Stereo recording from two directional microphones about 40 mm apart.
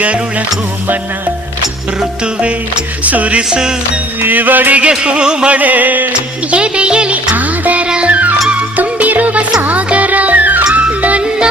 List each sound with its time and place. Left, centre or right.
2.2 s music: right
3.0 s music: right
4.2 s music: right
4.8 s music: right
5.5 s music: right
6.1 s music: right
7.3 s music: right
7.9 s music: right
8.4 s music: right